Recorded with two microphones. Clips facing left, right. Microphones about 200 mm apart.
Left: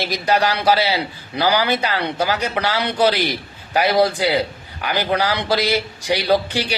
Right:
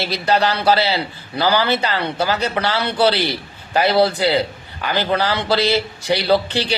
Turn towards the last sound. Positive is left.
turn(degrees=10)  # may be behind; listen again after turning